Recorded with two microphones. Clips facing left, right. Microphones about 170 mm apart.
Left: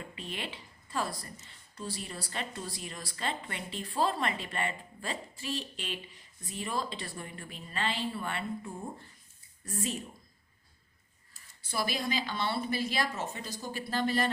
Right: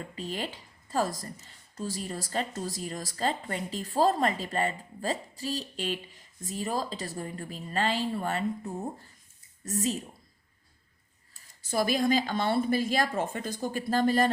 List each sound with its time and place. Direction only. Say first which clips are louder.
0.2 s a woman's voice: right 6 dB; 40° right (ahead or behind)
11.7 s a woman's voice: right 8 dB; 45° right (ahead or behind)